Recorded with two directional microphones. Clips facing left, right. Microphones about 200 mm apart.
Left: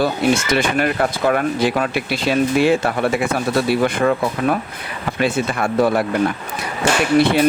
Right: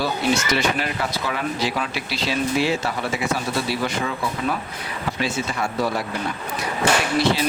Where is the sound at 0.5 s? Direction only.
55° left (ahead or behind).